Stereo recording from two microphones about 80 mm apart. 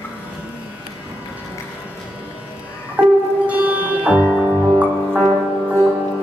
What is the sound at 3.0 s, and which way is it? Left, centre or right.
Music, centre.